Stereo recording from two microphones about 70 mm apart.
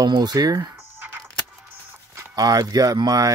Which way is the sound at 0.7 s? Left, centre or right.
Right.